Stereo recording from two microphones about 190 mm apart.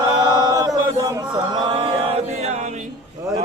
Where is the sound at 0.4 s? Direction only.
20° right (ahead or behind); by 2.6 s 35° right (ahead or behind).